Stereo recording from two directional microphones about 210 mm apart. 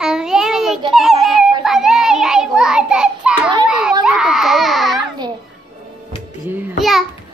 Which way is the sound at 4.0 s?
5° right (ahead or behind).